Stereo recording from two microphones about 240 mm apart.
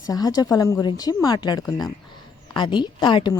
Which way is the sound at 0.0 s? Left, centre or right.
Centre.